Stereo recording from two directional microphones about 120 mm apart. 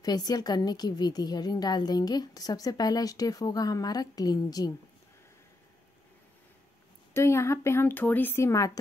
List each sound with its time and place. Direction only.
0.0 s a woman's voice: 35° left (ahead or behind)
7.2 s speech: 20° left (ahead or behind)